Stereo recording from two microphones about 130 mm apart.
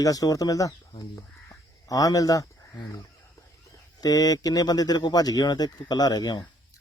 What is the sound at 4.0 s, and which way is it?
Speech, 30° left (ahead or behind).